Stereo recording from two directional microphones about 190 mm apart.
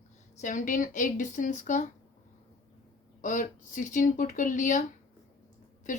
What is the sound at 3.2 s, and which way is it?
Speech, 45° left (ahead or behind).